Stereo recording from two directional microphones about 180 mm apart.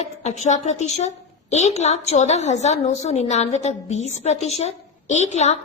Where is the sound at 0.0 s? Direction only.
40° left (ahead or behind).